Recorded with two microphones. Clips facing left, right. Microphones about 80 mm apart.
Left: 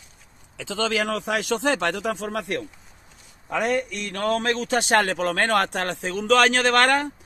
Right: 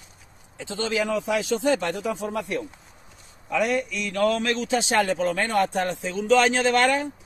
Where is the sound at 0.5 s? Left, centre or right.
Left.